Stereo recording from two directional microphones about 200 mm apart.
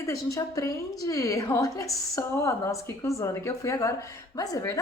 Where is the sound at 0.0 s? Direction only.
15° left (ahead or behind).